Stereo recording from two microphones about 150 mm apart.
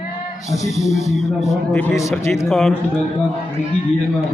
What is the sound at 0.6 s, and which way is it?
Speech, 50° left (ahead or behind).